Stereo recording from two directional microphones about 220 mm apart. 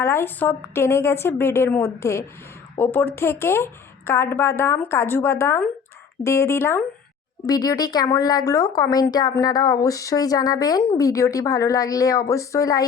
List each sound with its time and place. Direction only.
0.0 s speech: 10° left (ahead or behind)